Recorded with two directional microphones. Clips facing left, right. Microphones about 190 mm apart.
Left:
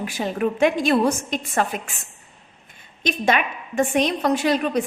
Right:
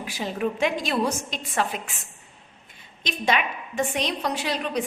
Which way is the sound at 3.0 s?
50° left (ahead or behind).